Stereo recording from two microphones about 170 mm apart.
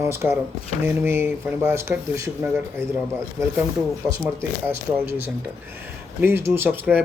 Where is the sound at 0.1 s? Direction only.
15° right (ahead or behind).